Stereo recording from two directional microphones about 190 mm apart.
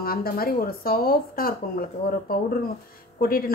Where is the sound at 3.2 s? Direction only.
50° left (ahead or behind).